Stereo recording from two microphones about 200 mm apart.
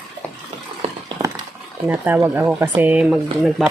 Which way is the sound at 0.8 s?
30° right (ahead or behind).